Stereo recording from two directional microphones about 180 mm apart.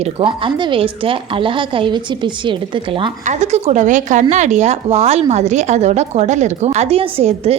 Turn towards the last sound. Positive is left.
turn(degrees=-35)  # may be behind; listen again after turning